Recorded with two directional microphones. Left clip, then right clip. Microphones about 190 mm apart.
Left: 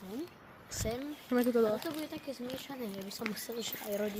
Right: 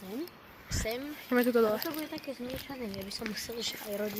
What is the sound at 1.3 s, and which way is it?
Speech, 10° left (ahead or behind).